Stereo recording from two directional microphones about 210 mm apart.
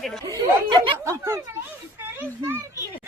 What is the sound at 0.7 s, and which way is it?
A child's voice, 15° right (ahead or behind).